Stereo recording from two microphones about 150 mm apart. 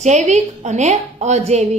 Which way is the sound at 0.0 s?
50° right (ahead or behind).